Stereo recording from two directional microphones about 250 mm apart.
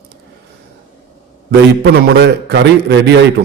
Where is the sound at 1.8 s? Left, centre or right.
Right.